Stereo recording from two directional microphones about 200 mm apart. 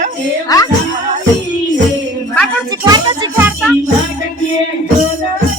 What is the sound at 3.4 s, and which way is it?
Music, 10° right (ahead or behind).